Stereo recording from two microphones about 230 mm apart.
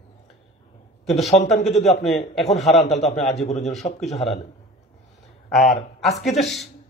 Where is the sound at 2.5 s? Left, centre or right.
Centre.